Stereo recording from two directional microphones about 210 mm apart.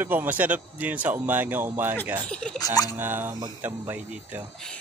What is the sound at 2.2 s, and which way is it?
Speech, 5° left (ahead or behind).